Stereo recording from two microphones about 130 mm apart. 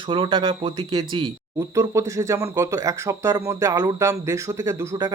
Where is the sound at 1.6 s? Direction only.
25° right (ahead or behind).